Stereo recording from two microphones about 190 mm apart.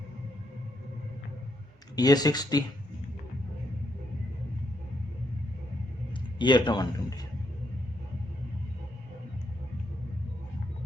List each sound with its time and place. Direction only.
2.0 s a man's voice: 20° left (ahead or behind)
6.4 s a man's voice: 25° left (ahead or behind)